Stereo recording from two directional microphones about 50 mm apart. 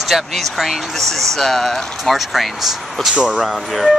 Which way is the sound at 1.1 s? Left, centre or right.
Centre.